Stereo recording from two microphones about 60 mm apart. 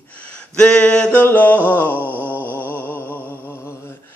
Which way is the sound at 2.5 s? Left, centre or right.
Left.